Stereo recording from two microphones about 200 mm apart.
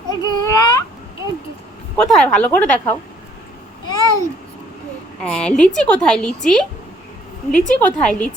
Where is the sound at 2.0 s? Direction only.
5° left (ahead or behind).